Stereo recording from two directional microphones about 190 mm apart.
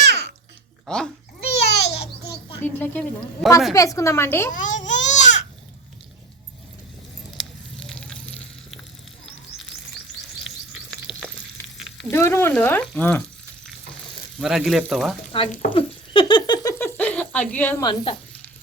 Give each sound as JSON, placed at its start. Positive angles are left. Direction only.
{"t": 0.9, "sound": "speech", "side_deg": 5}
{"t": 1.5, "sound": "a sound", "side_deg": 65}
{"t": 2.6, "sound": "speech", "side_deg": 10}
{"t": 3.8, "sound": "speech", "side_deg": 15}
{"t": 4.5, "sound": "baby cry", "side_deg": 40}
{"t": 7.3, "sound": "sizzle", "side_deg": 5}
{"t": 11.1, "sound": "frying", "side_deg": 25}
{"t": 11.8, "sound": "frying", "side_deg": 0}
{"t": 12.1, "sound": "speech", "side_deg": 10}
{"t": 14.3, "sound": "speech", "side_deg": 0}
{"t": 15.3, "sound": "speech", "side_deg": 25}
{"t": 15.7, "sound": "a sound", "side_deg": 25}
{"t": 17.8, "sound": "speech", "side_deg": 30}